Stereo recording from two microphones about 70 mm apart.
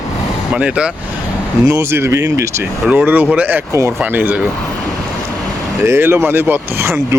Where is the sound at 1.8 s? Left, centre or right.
Right.